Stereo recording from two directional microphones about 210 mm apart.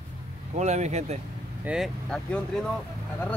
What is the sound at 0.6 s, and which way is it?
Speech, 35° right (ahead or behind).